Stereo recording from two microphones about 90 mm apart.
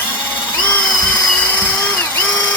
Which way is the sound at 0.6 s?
15° left (ahead or behind).